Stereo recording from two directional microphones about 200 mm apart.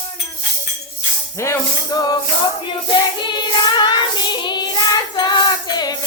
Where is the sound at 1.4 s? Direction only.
15° left (ahead or behind).